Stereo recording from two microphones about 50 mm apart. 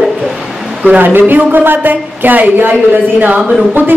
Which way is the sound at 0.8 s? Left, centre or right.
Right.